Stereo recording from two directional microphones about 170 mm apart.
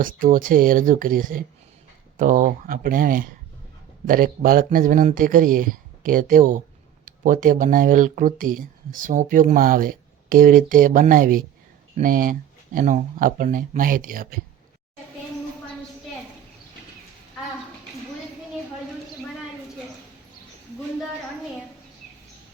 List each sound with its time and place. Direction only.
0.0 s speech: 55° right (ahead or behind)